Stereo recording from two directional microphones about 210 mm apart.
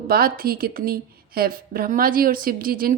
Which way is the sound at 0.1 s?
45° right (ahead or behind).